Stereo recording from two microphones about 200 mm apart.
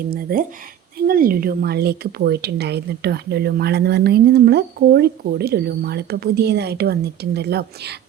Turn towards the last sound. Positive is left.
turn(degrees=-55)  # may be behind; listen again after turning